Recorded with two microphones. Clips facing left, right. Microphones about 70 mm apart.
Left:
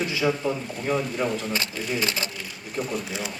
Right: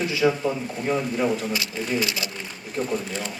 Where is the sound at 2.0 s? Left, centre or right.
Left.